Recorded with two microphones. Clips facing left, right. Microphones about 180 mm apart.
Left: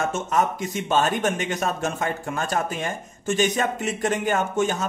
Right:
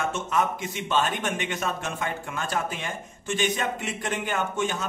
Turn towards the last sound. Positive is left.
turn(degrees=40)  # may be behind; listen again after turning